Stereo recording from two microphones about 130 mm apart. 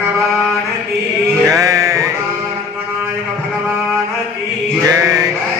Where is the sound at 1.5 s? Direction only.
25° right (ahead or behind).